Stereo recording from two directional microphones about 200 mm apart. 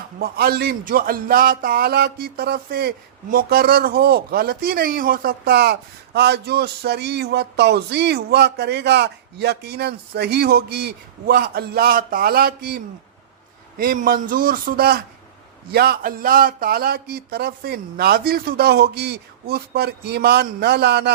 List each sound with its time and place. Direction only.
0.2 s a man's voice: 50° right (ahead or behind)